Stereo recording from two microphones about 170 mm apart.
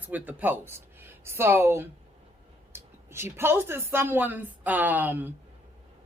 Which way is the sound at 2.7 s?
15° right (ahead or behind).